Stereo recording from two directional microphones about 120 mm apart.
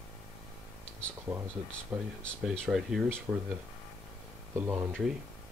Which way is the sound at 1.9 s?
10° right (ahead or behind).